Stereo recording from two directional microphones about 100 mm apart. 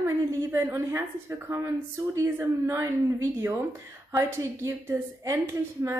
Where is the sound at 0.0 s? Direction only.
30° right (ahead or behind).